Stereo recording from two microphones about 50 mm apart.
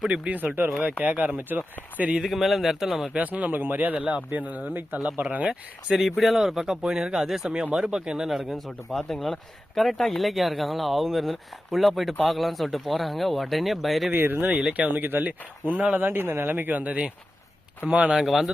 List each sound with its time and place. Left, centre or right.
0.1 s speech: right
2.2 s speech: centre
3.2 s speech: right
4.7 s speech: right
6.0 s speech: centre
8.4 s speech: centre
14.2 s speech: right
14.4 s speech: right
14.9 s speech: right
16.2 s speech: right
16.5 s speech: right